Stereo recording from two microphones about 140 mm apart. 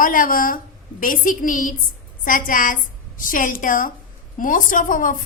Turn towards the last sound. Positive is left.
turn(degrees=75)  # may be behind; listen again after turning